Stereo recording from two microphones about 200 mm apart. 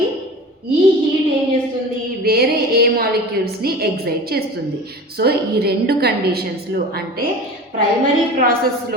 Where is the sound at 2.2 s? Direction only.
50° right (ahead or behind).